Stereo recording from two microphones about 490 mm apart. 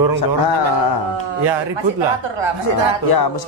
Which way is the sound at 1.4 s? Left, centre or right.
Right.